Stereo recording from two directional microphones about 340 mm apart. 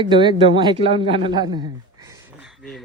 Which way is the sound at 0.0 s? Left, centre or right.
Centre.